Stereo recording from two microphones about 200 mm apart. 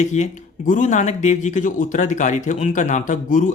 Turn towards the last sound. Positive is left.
turn(degrees=40)  # may be behind; listen again after turning